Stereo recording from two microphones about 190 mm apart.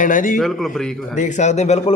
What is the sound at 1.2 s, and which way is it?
Speech, 40° left (ahead or behind).